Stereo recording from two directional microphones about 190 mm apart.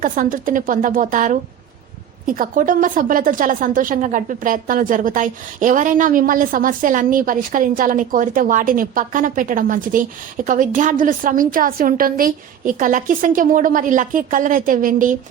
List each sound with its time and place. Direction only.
0.0 s a woman's voice: 45° right (ahead or behind)